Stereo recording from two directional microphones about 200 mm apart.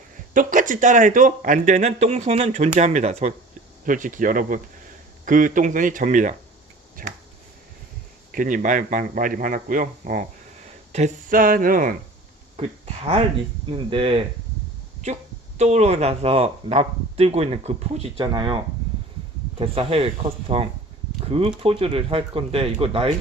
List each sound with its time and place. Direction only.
0.3 s a man's voice: 40° right (ahead or behind)
8.3 s a man's voice: 45° right (ahead or behind)
12.5 s speech: 30° right (ahead or behind)